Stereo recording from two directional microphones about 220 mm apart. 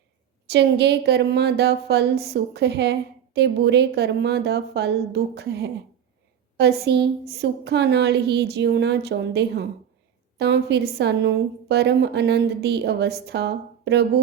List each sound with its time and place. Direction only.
0.4 s a woman's voice: 50° right (ahead or behind)